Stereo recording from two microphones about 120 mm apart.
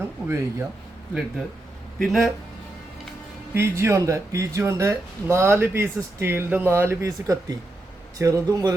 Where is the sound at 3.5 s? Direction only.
20° right (ahead or behind).